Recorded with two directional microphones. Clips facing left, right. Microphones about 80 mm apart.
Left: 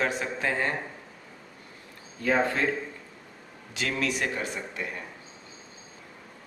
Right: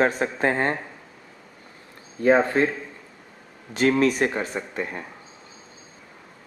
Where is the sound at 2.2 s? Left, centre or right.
Right.